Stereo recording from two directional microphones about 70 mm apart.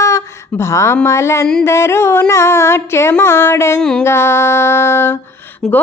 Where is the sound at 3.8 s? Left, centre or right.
Centre.